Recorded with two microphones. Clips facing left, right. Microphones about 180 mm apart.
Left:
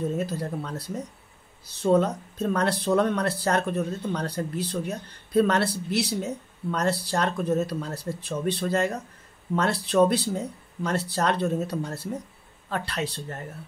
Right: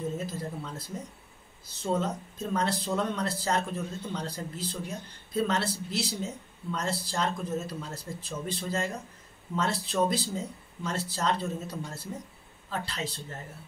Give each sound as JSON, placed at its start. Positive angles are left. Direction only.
{"t": 0.2, "sound": "speech", "side_deg": 70}